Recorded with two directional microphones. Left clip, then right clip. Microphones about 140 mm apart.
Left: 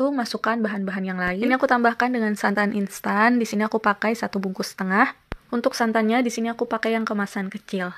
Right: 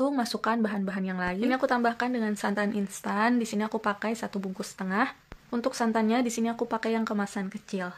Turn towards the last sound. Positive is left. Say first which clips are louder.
# left 6 dB
turn(degrees=35)  # may be behind; listen again after turning